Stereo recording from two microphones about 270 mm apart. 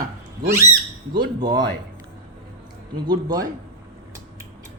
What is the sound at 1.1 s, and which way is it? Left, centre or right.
Speech, centre.